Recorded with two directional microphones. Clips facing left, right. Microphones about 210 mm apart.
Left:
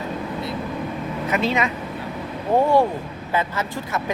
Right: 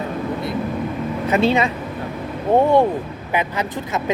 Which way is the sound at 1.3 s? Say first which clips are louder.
Right 5 dB; 30° right (ahead or behind).